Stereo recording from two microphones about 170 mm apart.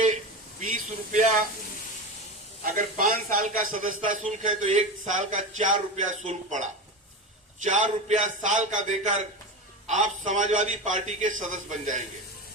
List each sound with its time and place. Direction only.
0.7 s speech: 50° right (ahead or behind)
2.7 s a man's voice: 50° right (ahead or behind)